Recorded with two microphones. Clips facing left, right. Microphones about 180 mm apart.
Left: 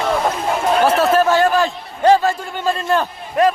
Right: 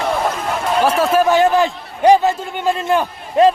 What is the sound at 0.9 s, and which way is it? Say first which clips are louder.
A man's voice: right 2 dB; 10° right (ahead or behind).